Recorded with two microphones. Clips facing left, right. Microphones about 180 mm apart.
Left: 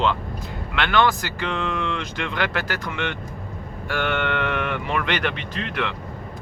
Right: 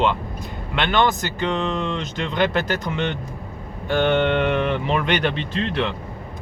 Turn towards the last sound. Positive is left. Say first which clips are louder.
# right 4 dB
turn(degrees=-25)  # may be behind; listen again after turning